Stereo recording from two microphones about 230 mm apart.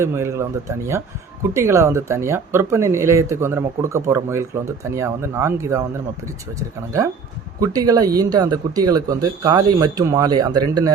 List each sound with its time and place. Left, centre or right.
0.0 s speech: centre